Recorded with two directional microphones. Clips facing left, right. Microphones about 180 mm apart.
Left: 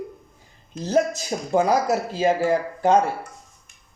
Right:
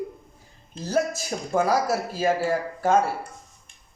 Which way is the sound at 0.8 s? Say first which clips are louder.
Left 4 dB; 20° left (ahead or behind).